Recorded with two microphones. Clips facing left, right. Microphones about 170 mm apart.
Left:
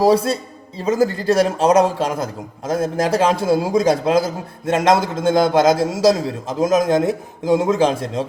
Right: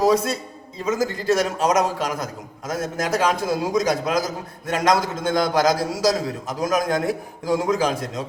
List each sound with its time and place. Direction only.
0.0 s a man's voice: 30° left (ahead or behind)